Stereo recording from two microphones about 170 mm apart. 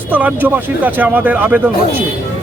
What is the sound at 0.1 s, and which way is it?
Speech, 10° right (ahead or behind).